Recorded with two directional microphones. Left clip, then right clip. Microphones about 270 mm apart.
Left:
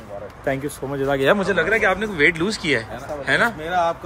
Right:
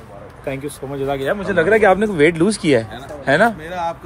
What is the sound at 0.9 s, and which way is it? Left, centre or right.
Speech, left.